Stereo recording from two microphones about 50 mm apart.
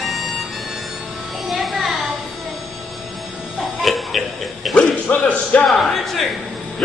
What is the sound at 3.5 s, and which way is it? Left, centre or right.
Music, centre.